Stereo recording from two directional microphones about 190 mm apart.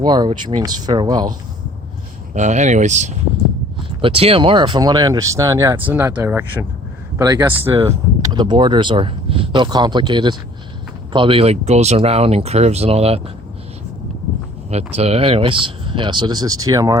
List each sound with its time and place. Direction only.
0.0 s speech: 20° right (ahead or behind)
2.3 s speech: 40° right (ahead or behind)
14.7 s speech: 35° right (ahead or behind); by 17.0 s 20° right (ahead or behind)